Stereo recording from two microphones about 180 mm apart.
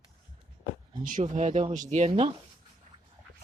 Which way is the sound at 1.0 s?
45° right (ahead or behind).